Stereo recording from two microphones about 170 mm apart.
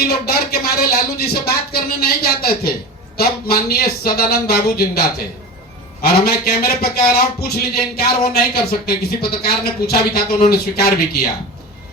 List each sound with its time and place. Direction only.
0.0 s speech: 65° left (ahead or behind)